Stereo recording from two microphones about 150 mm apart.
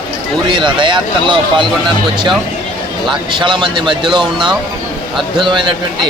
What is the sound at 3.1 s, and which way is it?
Speech, 30° right (ahead or behind).